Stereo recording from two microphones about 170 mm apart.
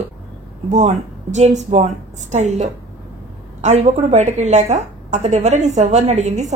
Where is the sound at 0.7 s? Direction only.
45° right (ahead or behind).